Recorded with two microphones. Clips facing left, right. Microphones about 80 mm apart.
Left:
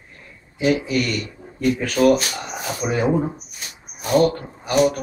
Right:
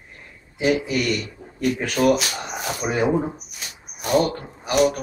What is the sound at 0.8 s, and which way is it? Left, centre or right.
Speech, centre.